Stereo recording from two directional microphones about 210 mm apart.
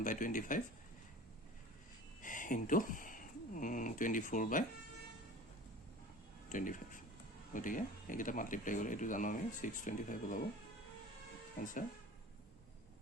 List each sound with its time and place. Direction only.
0.0 s speech: 40° left (ahead or behind)
2.2 s speech: 40° left (ahead or behind)
6.5 s speech: 40° left (ahead or behind)